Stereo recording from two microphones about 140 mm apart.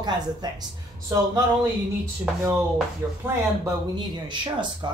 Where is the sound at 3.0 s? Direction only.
20° right (ahead or behind).